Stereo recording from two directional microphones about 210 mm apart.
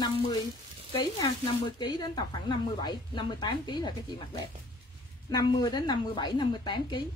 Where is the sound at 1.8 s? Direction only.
20° left (ahead or behind).